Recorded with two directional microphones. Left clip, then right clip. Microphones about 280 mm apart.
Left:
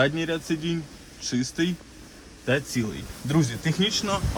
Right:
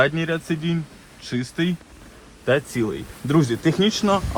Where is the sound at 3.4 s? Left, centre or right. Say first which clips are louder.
Right 6 dB; centre.